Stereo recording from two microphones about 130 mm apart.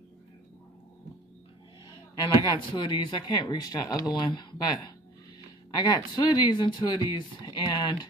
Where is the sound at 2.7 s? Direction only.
35° left (ahead or behind).